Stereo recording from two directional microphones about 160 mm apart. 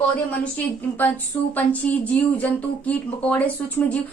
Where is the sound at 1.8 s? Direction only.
10° left (ahead or behind).